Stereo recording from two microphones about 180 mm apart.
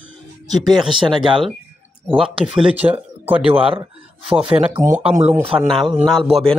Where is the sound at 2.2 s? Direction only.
5° right (ahead or behind).